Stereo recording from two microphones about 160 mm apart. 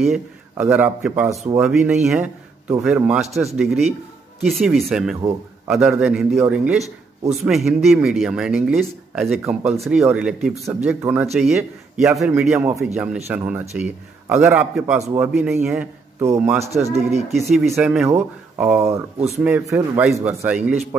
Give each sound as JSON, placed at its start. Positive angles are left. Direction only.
{"t": 0.0, "sound": "speech", "side_deg": -5}
{"t": 16.5, "sound": "speech", "side_deg": -40}
{"t": 17.3, "sound": "speech", "side_deg": 0}